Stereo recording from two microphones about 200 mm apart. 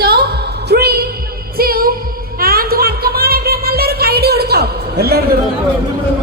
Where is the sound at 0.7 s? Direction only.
50° right (ahead or behind).